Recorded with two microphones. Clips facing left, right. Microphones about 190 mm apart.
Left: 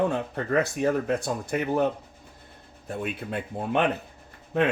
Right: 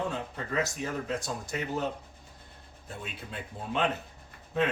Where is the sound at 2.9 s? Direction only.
60° left (ahead or behind).